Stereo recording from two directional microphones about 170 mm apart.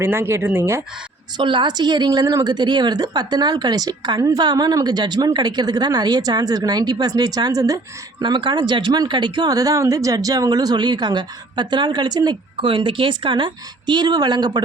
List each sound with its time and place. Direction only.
0.0 s speech: 15° right (ahead or behind)
1.4 s a woman's voice: 30° right (ahead or behind)